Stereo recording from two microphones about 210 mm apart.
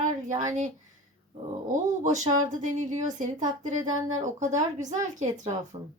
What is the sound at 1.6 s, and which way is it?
Speech, 35° right (ahead or behind).